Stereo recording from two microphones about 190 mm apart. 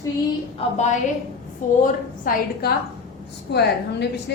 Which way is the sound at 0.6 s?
30° left (ahead or behind).